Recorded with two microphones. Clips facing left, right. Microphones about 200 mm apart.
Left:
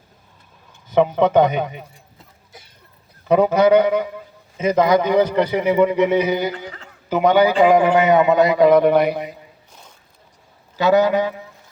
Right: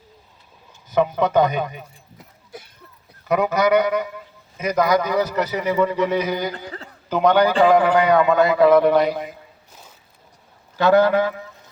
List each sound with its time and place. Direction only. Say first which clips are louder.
1.0 s a man's voice: left 3 dB; 25° left (ahead or behind)
3.2 s a man's voice: left 4 dB; 30° left (ahead or behind)
5.6 s a man's voice: left 3 dB; 15° left (ahead or behind)
10.8 s a man's voice: even; 10° left (ahead or behind)